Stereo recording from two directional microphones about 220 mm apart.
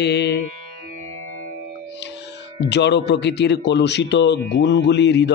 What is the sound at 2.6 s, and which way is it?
Speech, 50° left (ahead or behind).